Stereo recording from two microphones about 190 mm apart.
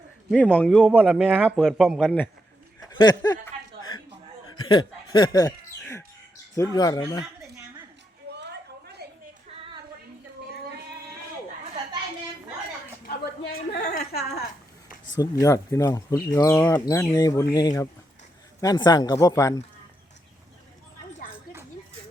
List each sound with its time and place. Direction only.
0.5 s speech: 5° left (ahead or behind)
0.9 s speech: 5° right (ahead or behind)
1.4 s speech: 5° left (ahead or behind)
3.0 s speech: 20° left (ahead or behind)
4.4 s a sound: 20° left (ahead or behind)
6.6 s speech: 20° left (ahead or behind)
8.4 s a sound: 60° right (ahead or behind)
13.1 s a sound: 55° left (ahead or behind)
15.1 s speech: 20° left (ahead or behind)